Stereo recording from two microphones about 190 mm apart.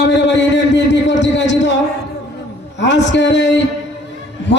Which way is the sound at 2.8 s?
70° left (ahead or behind).